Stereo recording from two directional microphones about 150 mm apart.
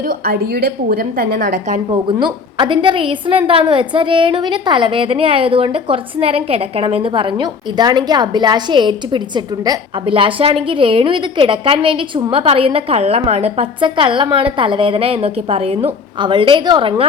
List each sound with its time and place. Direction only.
0.0 s a woman's voice: 85° right; by 1.8 s 60° right (ahead or behind)
1.9 s a woman's voice: 35° right (ahead or behind)
16.1 s a woman's voice: 30° right (ahead or behind)